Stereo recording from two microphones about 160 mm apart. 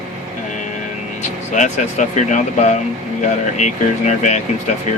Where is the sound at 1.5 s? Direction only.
50° left (ahead or behind).